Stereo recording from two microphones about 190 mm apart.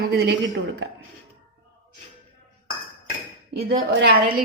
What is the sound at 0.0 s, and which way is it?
Speech, 55° right (ahead or behind).